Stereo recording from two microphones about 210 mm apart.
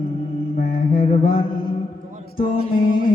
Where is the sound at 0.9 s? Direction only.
45° left (ahead or behind).